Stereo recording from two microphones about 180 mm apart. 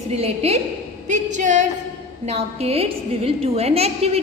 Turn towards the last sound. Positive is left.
turn(degrees=-35)  # may be behind; listen again after turning